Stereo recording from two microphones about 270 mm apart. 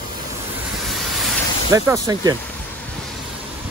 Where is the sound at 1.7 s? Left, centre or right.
Centre.